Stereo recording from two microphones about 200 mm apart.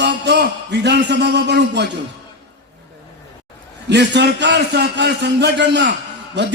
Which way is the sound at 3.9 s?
60° right (ahead or behind).